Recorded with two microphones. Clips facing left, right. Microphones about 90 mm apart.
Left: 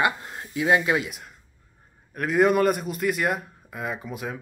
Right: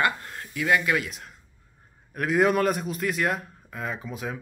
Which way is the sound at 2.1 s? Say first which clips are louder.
Left 2 dB; centre (ahead or behind).